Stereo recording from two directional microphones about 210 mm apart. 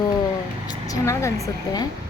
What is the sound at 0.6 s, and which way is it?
Speech, 15° left (ahead or behind).